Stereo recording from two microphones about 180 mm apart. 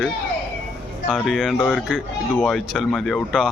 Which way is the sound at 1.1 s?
Centre (ahead or behind).